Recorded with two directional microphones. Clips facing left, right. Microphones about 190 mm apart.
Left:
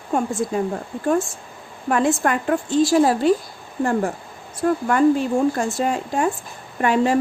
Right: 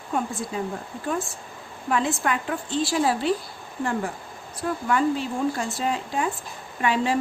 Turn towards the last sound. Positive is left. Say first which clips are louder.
# left 5 dB
turn(degrees=45)  # may be behind; listen again after turning